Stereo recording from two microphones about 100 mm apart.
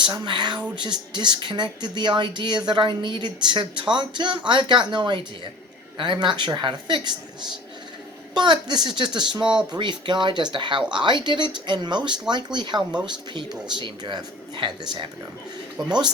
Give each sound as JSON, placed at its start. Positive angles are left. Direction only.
{"t": 0.0, "sound": "speech", "side_deg": -50}
{"t": 8.4, "sound": "speech", "side_deg": -50}